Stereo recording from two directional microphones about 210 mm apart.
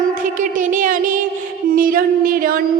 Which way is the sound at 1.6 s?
40° right (ahead or behind).